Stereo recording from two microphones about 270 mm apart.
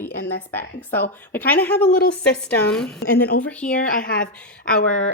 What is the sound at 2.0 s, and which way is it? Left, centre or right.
Speech, left.